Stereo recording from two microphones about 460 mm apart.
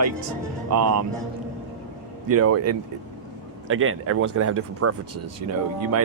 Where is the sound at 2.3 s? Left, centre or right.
Right.